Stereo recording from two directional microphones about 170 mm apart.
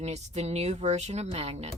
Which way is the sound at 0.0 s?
40° right (ahead or behind).